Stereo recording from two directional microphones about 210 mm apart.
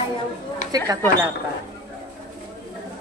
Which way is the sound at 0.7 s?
20° right (ahead or behind).